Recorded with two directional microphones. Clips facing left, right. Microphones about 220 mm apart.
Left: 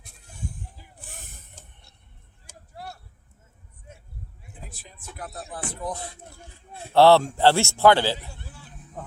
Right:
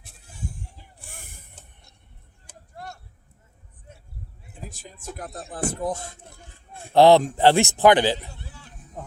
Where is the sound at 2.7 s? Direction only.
5° left (ahead or behind).